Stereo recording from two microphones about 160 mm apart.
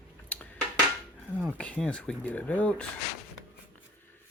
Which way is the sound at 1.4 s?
5° left (ahead or behind).